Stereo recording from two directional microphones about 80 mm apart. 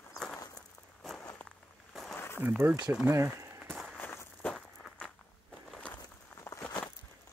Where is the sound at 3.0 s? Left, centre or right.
Right.